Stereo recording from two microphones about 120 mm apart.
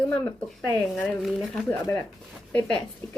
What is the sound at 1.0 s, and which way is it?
Speech, centre (ahead or behind).